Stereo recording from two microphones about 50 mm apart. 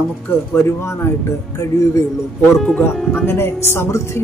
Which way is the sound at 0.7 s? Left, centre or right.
Left.